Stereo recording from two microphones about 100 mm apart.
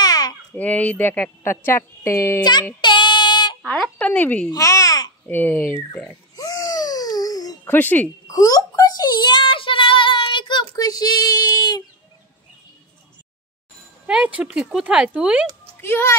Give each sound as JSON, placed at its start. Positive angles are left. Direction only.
{"t": 0.0, "sound": "babbling", "side_deg": 40}
{"t": 0.6, "sound": "a woman's voice", "side_deg": 15}
{"t": 2.8, "sound": "child singing", "side_deg": 50}
{"t": 4.0, "sound": "speech", "side_deg": 15}
{"t": 4.5, "sound": "child singing", "side_deg": 35}
{"t": 5.2, "sound": "a woman's voice", "side_deg": 20}
{"t": 6.3, "sound": "a sound", "side_deg": 35}
{"t": 7.6, "sound": "a woman's voice", "side_deg": 20}
{"t": 8.3, "sound": "child singing", "side_deg": 35}
{"t": 10.8, "sound": "child singing", "side_deg": 40}
{"t": 14.0, "sound": "speech", "side_deg": -10}
{"t": 15.8, "sound": "a woman's voice", "side_deg": 25}